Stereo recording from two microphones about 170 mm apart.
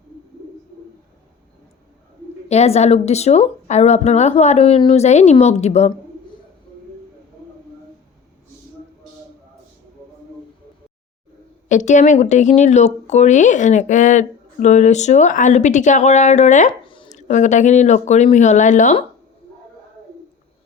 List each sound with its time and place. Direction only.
2.5 s a woman's voice: 40° left (ahead or behind)
11.7 s speech: 45° left (ahead or behind)